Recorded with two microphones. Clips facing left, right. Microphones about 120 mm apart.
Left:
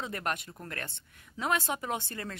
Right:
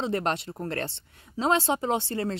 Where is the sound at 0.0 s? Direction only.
25° right (ahead or behind).